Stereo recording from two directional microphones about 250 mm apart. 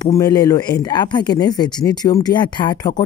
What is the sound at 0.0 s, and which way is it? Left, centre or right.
Speech, centre.